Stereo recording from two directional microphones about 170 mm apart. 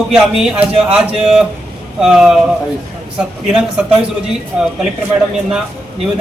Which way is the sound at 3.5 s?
5° right (ahead or behind).